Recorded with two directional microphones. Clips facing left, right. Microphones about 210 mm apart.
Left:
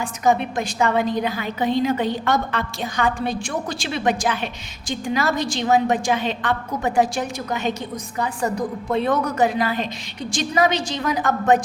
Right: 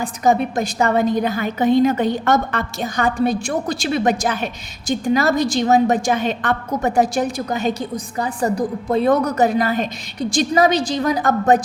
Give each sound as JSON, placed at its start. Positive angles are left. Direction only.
{"t": 0.0, "sound": "a woman's voice", "side_deg": -40}